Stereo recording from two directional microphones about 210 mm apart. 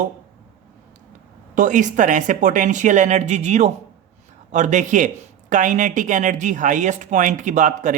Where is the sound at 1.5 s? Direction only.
40° right (ahead or behind).